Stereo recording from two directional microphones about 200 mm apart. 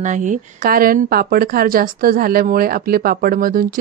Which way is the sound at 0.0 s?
40° right (ahead or behind).